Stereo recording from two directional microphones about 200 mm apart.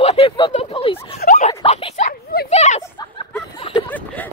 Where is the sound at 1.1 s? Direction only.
40° left (ahead or behind).